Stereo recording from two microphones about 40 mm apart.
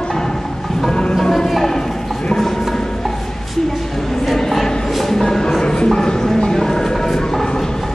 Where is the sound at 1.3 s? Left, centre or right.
Centre.